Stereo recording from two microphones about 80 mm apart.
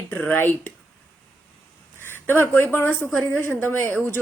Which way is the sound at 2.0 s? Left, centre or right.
Left.